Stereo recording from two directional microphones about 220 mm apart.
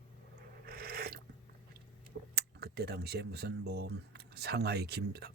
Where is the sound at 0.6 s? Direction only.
45° right (ahead or behind).